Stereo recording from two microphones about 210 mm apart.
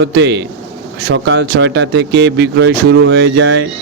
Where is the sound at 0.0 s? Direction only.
55° right (ahead or behind).